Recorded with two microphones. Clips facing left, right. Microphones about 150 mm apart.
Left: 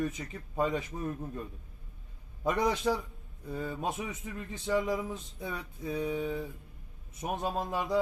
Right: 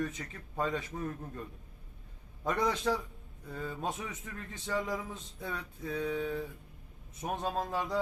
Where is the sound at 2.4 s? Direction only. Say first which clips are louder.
Left 2 dB; 15° left (ahead or behind).